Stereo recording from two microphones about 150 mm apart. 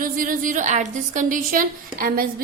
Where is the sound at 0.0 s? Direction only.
65° right (ahead or behind).